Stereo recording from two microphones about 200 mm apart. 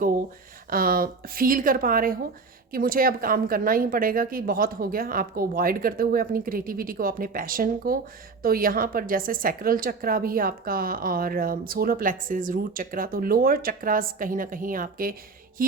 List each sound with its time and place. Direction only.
0.7 s a woman's voice: 45° right (ahead or behind)